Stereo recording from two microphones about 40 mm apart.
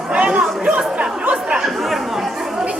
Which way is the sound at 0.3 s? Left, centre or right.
Centre.